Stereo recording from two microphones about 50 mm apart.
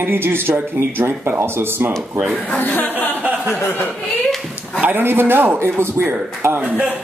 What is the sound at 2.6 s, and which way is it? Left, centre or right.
Speech, left.